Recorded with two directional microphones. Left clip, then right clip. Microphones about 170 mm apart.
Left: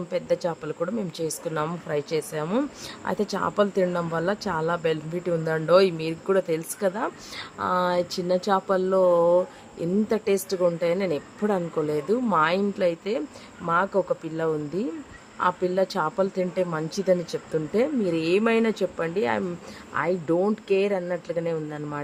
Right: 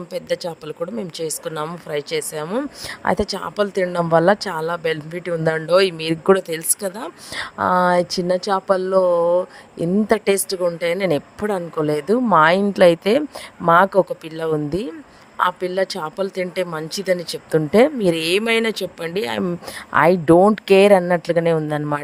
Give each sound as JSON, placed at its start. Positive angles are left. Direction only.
{"t": 0.1, "sound": "a woman's voice", "side_deg": -50}
{"t": 10.1, "sound": "a woman's voice", "side_deg": -50}